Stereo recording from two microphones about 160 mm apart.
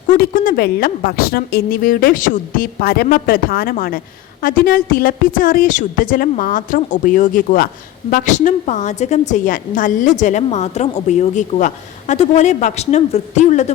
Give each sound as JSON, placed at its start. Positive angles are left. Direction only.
{"t": 0.1, "sound": "a woman's voice", "side_deg": 60}